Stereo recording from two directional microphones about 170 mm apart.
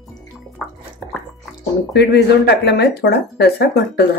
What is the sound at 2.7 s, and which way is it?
Speech, 75° left (ahead or behind).